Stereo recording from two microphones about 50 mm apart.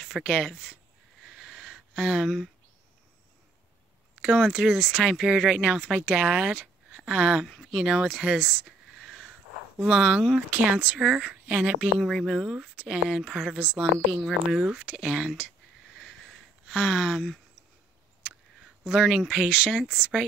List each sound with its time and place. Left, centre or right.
0.0 s speech: centre
1.2 s a sound: centre
2.2 s speech: centre
4.2 s speech: centre
7.6 s a sound: centre
10.6 s speech: right
11.0 s speech: right
12.0 s speech: centre; by 13.8 s right
14.5 s speech: centre
15.9 s a sound: centre
18.9 s speech: centre